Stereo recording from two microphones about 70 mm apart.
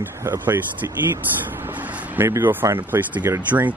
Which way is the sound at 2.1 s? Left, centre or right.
Right.